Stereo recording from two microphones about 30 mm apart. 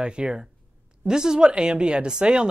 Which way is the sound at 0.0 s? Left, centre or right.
Right.